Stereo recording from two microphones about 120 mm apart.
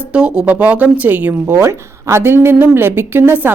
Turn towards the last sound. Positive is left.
turn(degrees=-15)  # may be behind; listen again after turning